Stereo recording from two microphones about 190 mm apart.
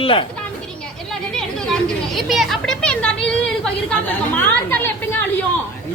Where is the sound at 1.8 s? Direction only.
Centre (ahead or behind).